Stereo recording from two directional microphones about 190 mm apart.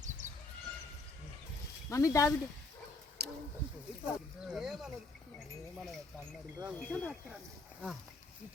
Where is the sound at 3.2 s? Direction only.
60° right (ahead or behind).